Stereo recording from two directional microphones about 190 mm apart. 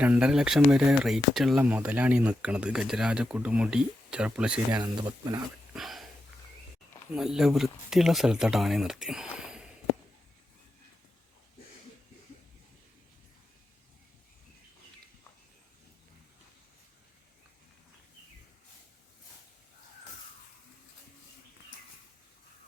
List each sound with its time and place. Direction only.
0.0 s speech: 5° right (ahead or behind)
4.7 s speech: 20° right (ahead or behind)
5.7 s a sound: centre (ahead or behind)
7.1 s speech: centre (ahead or behind)